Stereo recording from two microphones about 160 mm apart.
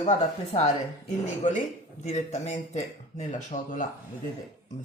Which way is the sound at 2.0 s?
45° left (ahead or behind).